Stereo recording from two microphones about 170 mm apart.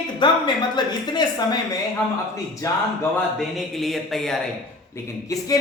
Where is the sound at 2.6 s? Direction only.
20° left (ahead or behind).